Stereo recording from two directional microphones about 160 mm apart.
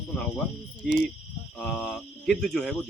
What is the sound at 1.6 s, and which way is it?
Speech, 5° left (ahead or behind).